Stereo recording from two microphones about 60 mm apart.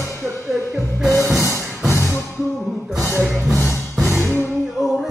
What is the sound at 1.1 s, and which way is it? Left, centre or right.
Music, left.